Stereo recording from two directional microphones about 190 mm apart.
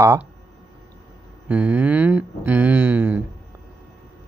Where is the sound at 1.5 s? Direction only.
10° right (ahead or behind).